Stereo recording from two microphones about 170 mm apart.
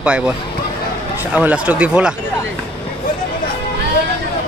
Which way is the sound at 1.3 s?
10° right (ahead or behind).